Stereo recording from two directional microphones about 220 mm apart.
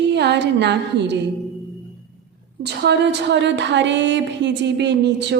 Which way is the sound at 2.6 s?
50° right (ahead or behind).